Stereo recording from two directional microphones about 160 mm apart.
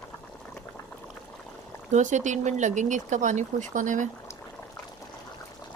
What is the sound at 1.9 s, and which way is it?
Speech, 50° right (ahead or behind).